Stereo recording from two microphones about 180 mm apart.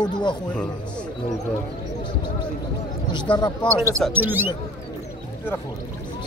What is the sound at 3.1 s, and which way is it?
Speech, 25° left (ahead or behind).